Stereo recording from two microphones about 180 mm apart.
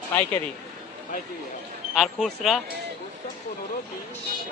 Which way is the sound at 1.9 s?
Centre (ahead or behind).